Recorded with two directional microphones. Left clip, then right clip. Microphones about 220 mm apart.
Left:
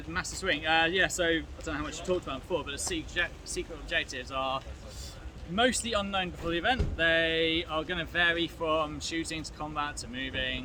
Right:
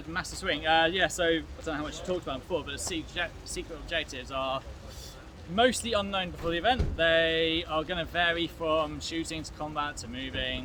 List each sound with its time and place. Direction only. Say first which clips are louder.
0.1 s speech: left 1 dB; 15° right (ahead or behind)